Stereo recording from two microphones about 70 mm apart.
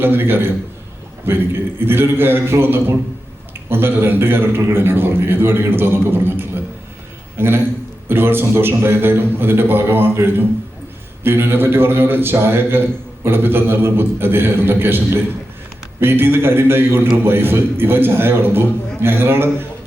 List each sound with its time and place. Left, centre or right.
0.0 s a man's voice: right